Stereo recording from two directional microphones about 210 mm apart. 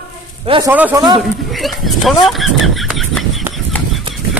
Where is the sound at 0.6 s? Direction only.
10° right (ahead or behind).